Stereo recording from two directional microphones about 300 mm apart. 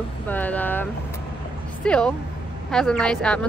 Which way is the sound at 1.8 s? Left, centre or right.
Centre.